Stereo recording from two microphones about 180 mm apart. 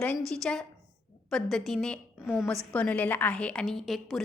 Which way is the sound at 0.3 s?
5° left (ahead or behind).